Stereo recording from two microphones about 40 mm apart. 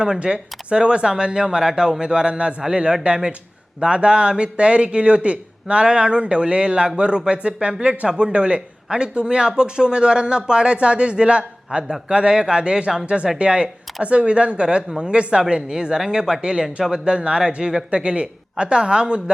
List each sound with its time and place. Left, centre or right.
0.0 s a man's voice: right